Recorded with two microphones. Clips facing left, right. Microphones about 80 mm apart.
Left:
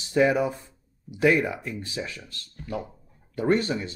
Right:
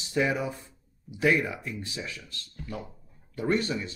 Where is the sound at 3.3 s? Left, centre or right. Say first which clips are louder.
Left 4 dB; left.